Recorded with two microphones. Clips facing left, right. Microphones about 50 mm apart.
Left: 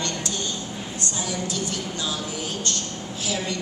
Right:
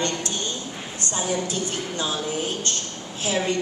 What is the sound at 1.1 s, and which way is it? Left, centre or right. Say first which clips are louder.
A woman's voice: right 5 dB; right.